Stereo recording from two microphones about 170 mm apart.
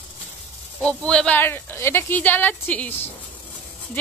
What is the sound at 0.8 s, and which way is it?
Speech, 5° left (ahead or behind).